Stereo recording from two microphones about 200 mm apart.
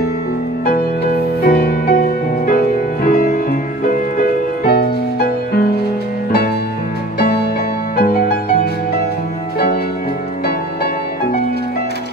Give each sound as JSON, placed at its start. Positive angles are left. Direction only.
{"t": 1.4, "sound": "music", "side_deg": 50}
{"t": 7.2, "sound": "music", "side_deg": 50}